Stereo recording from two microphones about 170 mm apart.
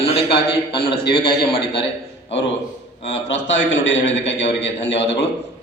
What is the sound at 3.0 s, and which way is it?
A man's voice, 90° left.